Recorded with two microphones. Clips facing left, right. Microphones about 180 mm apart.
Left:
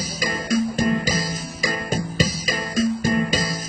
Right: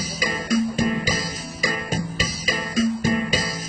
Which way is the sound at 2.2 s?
40° left (ahead or behind).